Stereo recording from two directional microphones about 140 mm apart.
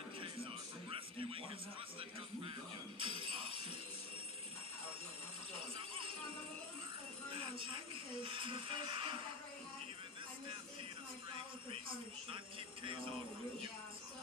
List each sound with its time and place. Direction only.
0.2 s music: 40° right (ahead or behind)
3.0 s music: 40° right (ahead or behind)
5.5 s jingle bell: 40° right (ahead or behind)
7.3 s music: 40° right (ahead or behind)
12.8 s music: 40° right (ahead or behind)